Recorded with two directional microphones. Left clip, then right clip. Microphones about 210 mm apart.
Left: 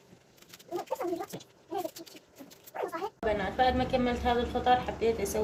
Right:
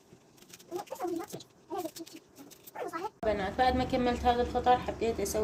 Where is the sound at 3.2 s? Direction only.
40° right (ahead or behind).